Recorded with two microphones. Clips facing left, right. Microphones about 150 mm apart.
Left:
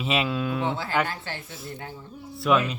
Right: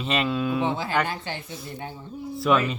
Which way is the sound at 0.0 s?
5° left (ahead or behind).